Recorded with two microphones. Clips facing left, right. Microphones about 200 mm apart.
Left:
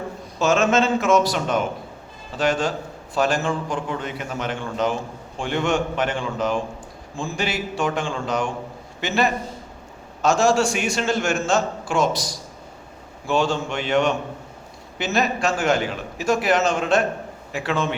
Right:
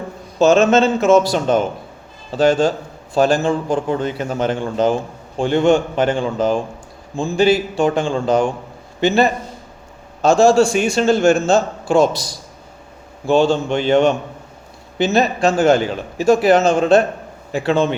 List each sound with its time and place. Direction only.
0.3 s a man's voice: 30° right (ahead or behind)
13.2 s a man's voice: 25° right (ahead or behind)